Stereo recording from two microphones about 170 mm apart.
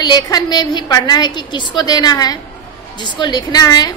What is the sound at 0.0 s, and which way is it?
A woman's voice, 25° left (ahead or behind).